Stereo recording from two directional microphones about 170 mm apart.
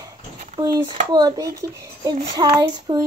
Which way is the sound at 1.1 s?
25° right (ahead or behind).